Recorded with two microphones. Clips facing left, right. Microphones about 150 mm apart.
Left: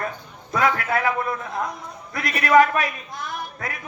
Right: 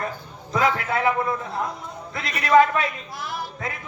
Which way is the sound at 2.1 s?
25° right (ahead or behind).